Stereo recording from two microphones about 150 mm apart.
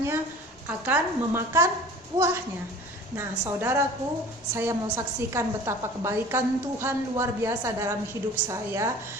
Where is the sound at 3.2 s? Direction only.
15° right (ahead or behind).